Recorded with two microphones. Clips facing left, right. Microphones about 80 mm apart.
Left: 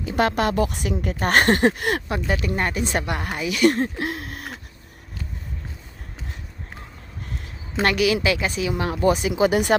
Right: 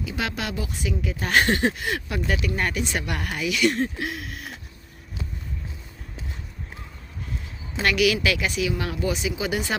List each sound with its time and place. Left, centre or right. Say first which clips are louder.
0.0 s speech: left 8 dB; left
2.0 s a woman's voice: left 2 dB; left
7.8 s a woman's voice: left 2 dB; left